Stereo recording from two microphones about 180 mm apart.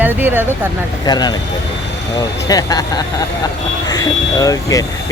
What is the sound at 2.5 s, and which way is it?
Speech, 20° left (ahead or behind).